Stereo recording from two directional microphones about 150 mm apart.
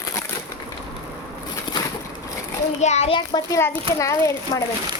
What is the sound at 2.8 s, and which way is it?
Speech, 45° left (ahead or behind).